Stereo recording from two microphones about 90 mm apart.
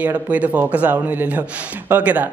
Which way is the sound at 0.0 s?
15° right (ahead or behind).